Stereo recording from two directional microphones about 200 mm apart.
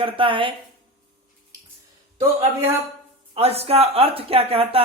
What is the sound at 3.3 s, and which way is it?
Speech, 30° right (ahead or behind).